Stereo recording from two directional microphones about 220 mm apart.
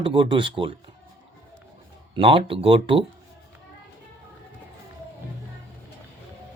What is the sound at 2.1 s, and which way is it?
Speech, 25° right (ahead or behind).